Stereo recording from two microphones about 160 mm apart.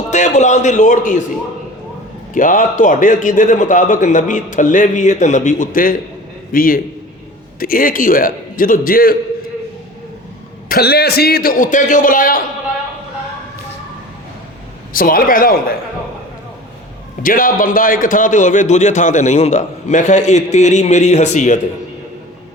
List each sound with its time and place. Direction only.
0.1 s a man's voice: 50° left (ahead or behind)
2.3 s a man's voice: 55° left (ahead or behind)
10.7 s a man's voice: 80° left; by 12.4 s 60° left (ahead or behind)
14.9 s a man's voice: 60° left (ahead or behind)
17.2 s a man's voice: 60° left (ahead or behind)